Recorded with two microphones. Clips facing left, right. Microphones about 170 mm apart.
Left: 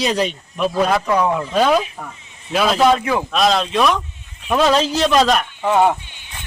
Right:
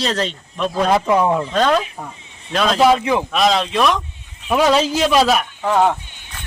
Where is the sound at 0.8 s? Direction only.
25° right (ahead or behind).